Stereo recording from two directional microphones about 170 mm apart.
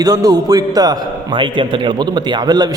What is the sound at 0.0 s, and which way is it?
A man's voice, 20° right (ahead or behind).